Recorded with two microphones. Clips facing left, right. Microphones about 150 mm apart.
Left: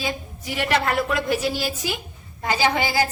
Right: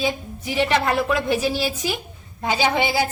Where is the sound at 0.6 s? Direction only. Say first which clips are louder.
Right 1 dB; 15° right (ahead or behind).